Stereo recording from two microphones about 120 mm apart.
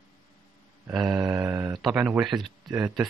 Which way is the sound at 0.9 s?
10° right (ahead or behind).